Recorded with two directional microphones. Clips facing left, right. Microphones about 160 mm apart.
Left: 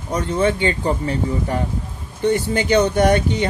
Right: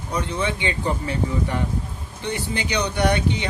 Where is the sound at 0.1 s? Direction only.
45° left (ahead or behind).